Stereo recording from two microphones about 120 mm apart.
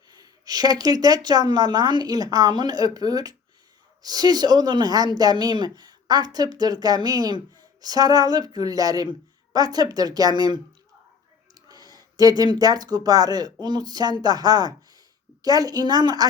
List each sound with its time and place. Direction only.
0.1 s speech: 35° right (ahead or behind)
11.7 s speech: 35° right (ahead or behind)